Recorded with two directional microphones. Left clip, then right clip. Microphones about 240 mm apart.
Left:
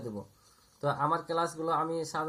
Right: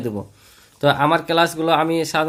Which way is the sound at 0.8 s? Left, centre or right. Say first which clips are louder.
Right 13 dB; right.